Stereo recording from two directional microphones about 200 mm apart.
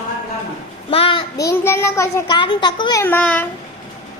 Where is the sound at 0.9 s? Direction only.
25° left (ahead or behind); by 3.4 s 10° left (ahead or behind).